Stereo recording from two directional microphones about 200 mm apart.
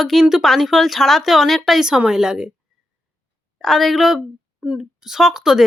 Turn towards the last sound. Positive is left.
turn(degrees=-5)  # may be behind; listen again after turning